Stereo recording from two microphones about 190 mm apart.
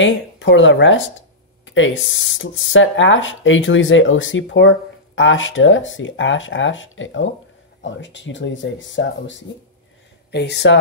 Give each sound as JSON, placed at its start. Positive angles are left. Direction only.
{"t": 0.0, "sound": "speech", "side_deg": 75}
{"t": 7.8, "sound": "speech", "side_deg": 75}
{"t": 10.3, "sound": "speech", "side_deg": 65}